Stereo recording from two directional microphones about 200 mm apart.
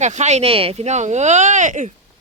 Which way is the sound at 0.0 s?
35° right (ahead or behind).